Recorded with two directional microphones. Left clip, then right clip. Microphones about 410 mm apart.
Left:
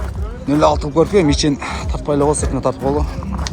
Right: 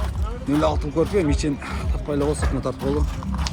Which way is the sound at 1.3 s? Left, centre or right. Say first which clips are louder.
Left 8 dB; centre.